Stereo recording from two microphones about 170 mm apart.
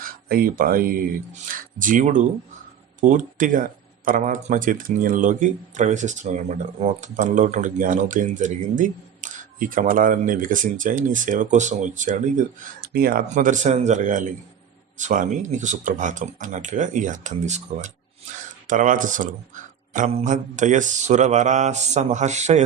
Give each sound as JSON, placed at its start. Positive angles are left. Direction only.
{"t": 0.0, "sound": "speech", "side_deg": -60}